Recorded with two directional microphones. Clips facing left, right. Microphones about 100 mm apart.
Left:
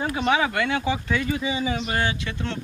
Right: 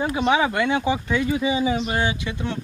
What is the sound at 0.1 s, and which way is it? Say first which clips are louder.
Speech: right 1 dB; 20° right (ahead or behind).